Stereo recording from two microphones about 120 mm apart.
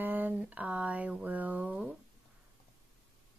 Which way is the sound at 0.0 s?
15° right (ahead or behind).